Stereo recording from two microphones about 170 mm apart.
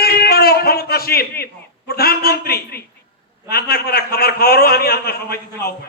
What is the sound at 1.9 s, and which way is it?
A man's voice, 65° left (ahead or behind).